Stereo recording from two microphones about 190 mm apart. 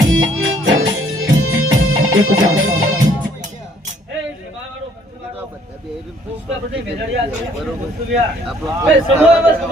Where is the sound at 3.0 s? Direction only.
40° right (ahead or behind).